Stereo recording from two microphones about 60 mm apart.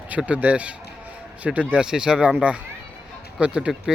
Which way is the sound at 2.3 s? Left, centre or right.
Right.